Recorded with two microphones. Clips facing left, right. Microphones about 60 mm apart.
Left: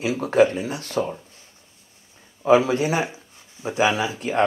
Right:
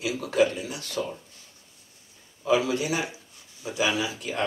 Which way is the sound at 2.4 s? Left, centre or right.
Left.